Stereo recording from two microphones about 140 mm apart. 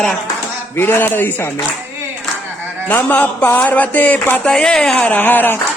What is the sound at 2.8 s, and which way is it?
Speech, 10° left (ahead or behind).